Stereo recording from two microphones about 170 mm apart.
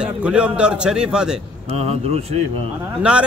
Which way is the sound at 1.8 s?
35° right (ahead or behind).